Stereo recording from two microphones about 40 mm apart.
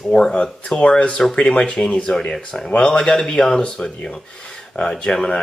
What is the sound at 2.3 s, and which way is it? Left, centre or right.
Speech, centre.